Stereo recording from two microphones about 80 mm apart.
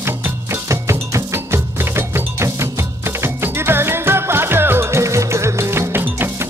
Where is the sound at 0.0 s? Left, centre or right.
Right.